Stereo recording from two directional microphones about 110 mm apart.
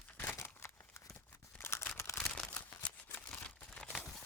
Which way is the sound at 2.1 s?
10° left (ahead or behind).